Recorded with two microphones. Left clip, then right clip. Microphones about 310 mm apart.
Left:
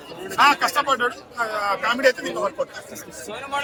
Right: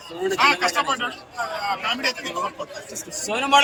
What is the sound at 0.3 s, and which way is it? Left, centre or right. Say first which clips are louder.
A man's voice: left 2 dB; centre.